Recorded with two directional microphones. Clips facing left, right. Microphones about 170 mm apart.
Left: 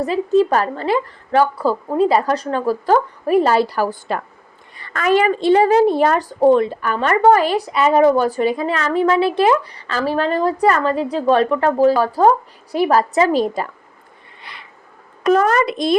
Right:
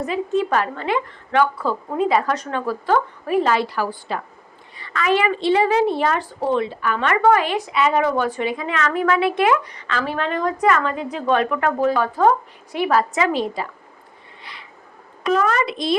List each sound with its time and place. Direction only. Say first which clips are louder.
0.0 s a woman's voice: left 6 dB; 35° left (ahead or behind)
15.2 s speech: left 5 dB; 45° left (ahead or behind)